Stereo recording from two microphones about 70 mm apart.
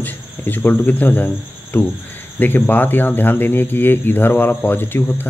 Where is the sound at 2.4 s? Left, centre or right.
Left.